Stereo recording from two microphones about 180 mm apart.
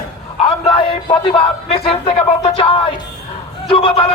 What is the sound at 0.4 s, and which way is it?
A man's voice, 30° left (ahead or behind).